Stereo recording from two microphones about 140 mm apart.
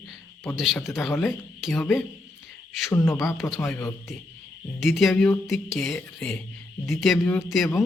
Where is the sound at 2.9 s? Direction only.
20° left (ahead or behind).